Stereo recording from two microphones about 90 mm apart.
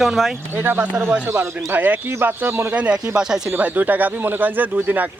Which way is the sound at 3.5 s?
20° right (ahead or behind).